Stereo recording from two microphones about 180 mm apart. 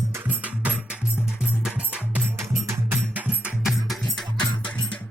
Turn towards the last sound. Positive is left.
turn(degrees=5)  # may be behind; listen again after turning